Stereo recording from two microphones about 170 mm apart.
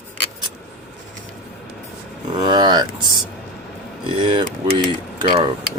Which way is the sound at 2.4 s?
25° right (ahead or behind).